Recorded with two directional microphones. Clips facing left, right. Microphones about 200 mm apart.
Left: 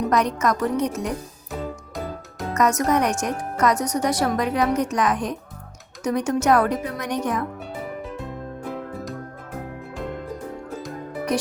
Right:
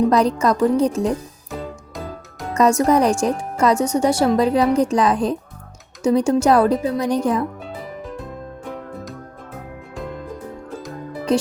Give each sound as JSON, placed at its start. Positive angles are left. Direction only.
{"t": 0.1, "sound": "speech", "side_deg": -30}
{"t": 1.5, "sound": "music", "side_deg": 0}
{"t": 2.5, "sound": "a woman's voice", "side_deg": -30}